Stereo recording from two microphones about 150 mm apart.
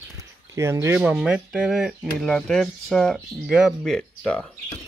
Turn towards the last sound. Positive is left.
turn(degrees=5)  # may be behind; listen again after turning